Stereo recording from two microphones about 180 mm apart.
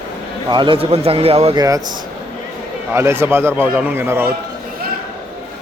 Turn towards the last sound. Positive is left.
turn(degrees=-10)  # may be behind; listen again after turning